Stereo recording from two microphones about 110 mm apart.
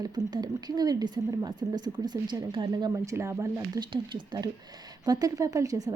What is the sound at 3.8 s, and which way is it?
A woman's voice, 40° right (ahead or behind).